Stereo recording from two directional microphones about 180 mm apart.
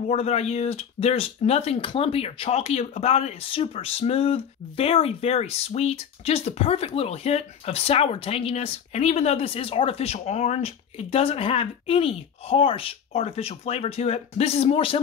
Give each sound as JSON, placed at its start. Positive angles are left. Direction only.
{"t": 0.1, "sound": "speech", "side_deg": 35}